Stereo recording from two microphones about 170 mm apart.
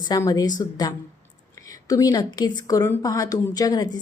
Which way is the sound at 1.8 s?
20° left (ahead or behind).